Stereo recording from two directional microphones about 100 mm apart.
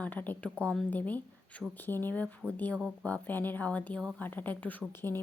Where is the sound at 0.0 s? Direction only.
15° left (ahead or behind).